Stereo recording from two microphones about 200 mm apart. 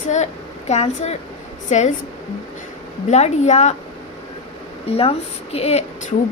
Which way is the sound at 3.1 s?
35° left (ahead or behind).